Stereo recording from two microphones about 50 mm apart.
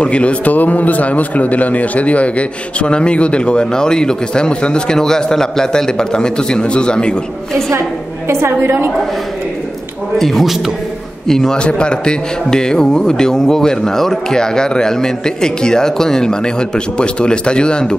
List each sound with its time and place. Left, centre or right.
0.0 s a man's voice: left
8.3 s a woman's voice: right
10.1 s a man's voice: centre
11.2 s a man's voice: centre